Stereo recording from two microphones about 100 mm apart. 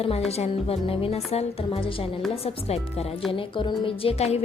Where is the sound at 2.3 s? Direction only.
85° left.